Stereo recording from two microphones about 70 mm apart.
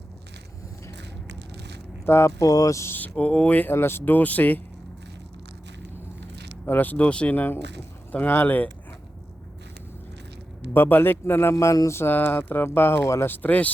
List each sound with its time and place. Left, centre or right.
2.0 s speech: left
2.4 s speech: left
2.9 s speech: left
3.8 s speech: left
6.7 s speech: left
10.8 s speech: left
11.5 s speech: left
11.9 s speech: left